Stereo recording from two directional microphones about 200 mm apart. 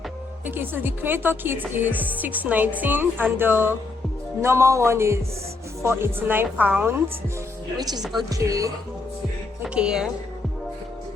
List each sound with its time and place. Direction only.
0.4 s speech: 10° right (ahead or behind)
7.8 s speech: 20° right (ahead or behind)
9.6 s speech: 5° right (ahead or behind)